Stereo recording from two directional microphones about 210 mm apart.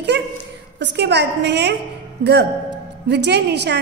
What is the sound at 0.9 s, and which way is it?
Speech, 55° right (ahead or behind).